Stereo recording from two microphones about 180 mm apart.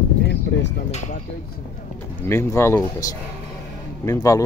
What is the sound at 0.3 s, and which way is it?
Vehicle, 75° left (ahead or behind).